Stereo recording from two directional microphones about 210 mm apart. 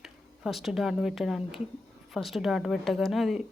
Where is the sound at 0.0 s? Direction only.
Centre (ahead or behind).